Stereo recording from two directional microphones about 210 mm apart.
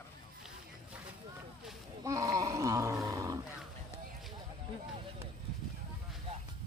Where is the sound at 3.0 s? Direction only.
15° right (ahead or behind).